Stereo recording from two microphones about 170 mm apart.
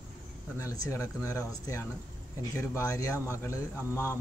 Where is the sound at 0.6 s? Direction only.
15° left (ahead or behind).